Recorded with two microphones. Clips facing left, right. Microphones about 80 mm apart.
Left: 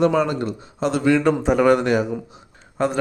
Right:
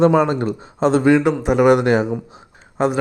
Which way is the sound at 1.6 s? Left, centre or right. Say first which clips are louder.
Right 5 dB; right.